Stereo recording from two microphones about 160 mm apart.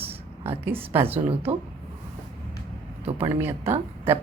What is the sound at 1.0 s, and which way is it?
Speech, 35° right (ahead or behind).